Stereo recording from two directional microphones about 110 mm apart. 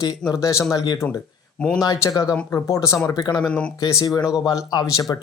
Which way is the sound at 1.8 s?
35° left (ahead or behind).